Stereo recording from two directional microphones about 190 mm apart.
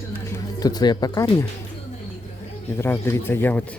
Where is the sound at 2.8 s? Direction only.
10° left (ahead or behind).